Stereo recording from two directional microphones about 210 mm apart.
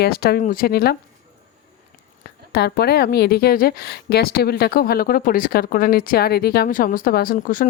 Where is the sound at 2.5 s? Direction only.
50° left (ahead or behind).